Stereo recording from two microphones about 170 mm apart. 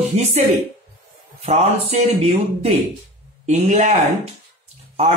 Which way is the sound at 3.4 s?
45° right (ahead or behind).